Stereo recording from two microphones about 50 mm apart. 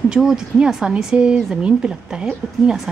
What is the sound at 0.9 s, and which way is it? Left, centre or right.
Speech, right.